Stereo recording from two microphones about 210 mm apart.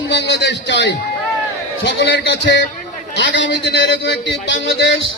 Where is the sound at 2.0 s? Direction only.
55° left (ahead or behind).